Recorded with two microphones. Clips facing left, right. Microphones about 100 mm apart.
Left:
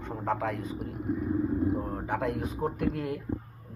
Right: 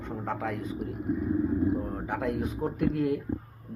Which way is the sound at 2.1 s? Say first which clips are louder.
Even; 20° left (ahead or behind).